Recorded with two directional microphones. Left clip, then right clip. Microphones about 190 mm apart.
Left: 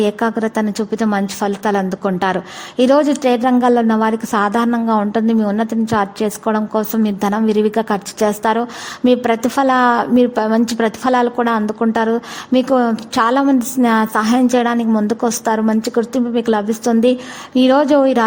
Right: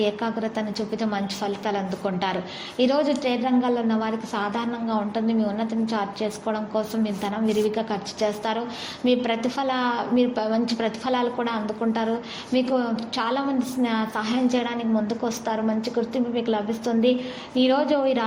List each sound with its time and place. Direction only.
0.0 s a woman's voice: 50° left (ahead or behind)